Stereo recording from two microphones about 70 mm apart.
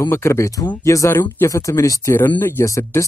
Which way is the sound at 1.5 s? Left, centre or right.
Left.